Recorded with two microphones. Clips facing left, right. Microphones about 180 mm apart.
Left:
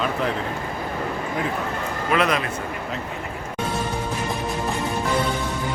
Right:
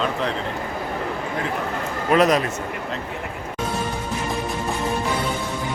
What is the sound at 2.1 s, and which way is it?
Speech, 40° right (ahead or behind).